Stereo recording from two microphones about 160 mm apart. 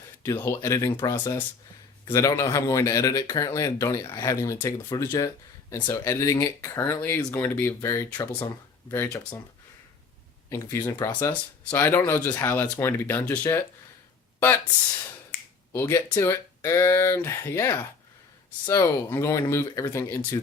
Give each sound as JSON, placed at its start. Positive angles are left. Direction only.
{"t": 0.4, "sound": "speech", "side_deg": 15}
{"t": 10.5, "sound": "speech", "side_deg": 15}
{"t": 11.1, "sound": "speech", "side_deg": 10}